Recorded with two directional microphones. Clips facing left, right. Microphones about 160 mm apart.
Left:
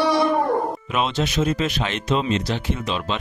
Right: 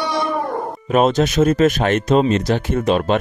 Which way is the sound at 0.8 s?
45° right (ahead or behind).